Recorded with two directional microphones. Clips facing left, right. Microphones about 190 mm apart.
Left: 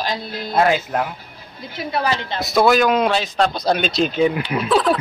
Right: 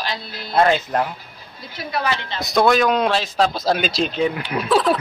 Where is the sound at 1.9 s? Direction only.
35° left (ahead or behind).